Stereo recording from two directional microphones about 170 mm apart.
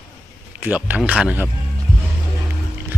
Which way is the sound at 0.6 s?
10° right (ahead or behind).